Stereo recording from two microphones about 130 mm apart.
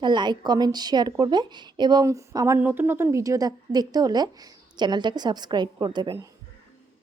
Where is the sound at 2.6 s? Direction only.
15° right (ahead or behind); by 6.2 s 35° right (ahead or behind).